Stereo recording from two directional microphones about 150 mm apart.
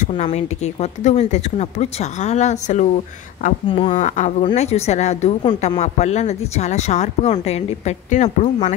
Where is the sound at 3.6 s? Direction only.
35° left (ahead or behind).